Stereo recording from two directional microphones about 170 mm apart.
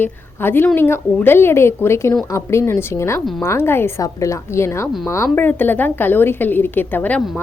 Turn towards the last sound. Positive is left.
turn(degrees=5)  # may be behind; listen again after turning